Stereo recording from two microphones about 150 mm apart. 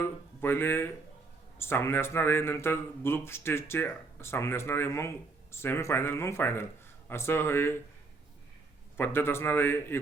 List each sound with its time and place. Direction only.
0.0 s a man's voice: 15° left (ahead or behind)
9.0 s a man's voice: 15° left (ahead or behind)